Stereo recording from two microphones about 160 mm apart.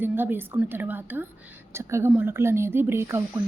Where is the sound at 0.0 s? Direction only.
15° right (ahead or behind).